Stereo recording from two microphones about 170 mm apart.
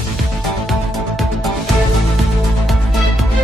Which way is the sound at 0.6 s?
Centre (ahead or behind).